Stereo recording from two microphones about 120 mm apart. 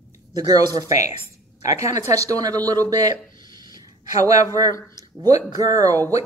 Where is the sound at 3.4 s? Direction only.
35° right (ahead or behind).